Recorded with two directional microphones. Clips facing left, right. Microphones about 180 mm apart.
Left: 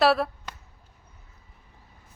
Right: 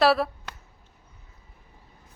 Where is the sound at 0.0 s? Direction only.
Centre (ahead or behind).